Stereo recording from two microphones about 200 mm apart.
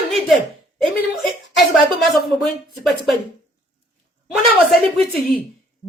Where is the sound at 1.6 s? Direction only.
Centre (ahead or behind).